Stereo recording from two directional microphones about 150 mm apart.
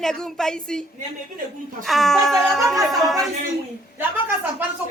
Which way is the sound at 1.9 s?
Centre (ahead or behind).